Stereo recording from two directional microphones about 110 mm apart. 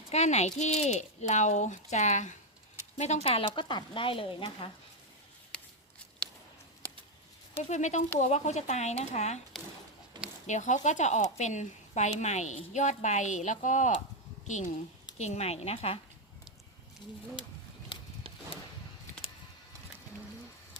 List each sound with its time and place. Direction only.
0.1 s a woman's voice: 85° left; by 4.7 s 50° left (ahead or behind)
7.6 s a woman's voice: 90° left
10.4 s a woman's voice: 90° left
15.2 s a woman's voice: 85° left; by 16.0 s 65° left (ahead or behind)
17.9 s a sound: 50° left (ahead or behind)